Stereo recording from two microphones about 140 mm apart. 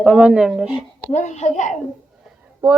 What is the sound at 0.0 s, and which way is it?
Speech, 5° right (ahead or behind).